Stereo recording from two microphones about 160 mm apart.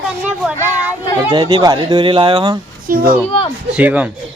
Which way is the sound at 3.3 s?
30° left (ahead or behind).